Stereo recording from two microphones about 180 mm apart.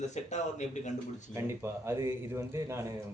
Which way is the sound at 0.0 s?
40° left (ahead or behind).